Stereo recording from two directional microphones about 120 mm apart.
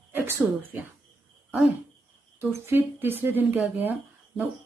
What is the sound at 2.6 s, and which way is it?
Speech, 15° right (ahead or behind).